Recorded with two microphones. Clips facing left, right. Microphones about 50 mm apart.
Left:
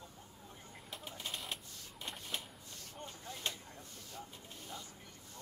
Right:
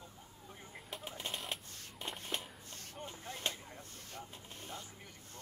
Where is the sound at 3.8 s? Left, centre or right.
Right.